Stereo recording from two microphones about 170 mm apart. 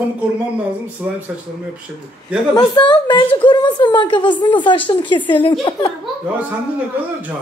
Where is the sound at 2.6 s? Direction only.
25° left (ahead or behind).